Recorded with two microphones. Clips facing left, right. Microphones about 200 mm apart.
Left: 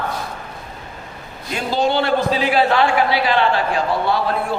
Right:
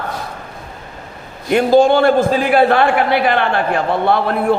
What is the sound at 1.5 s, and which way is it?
A man's voice, 55° right (ahead or behind).